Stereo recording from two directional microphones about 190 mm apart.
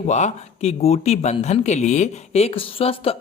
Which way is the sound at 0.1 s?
35° left (ahead or behind).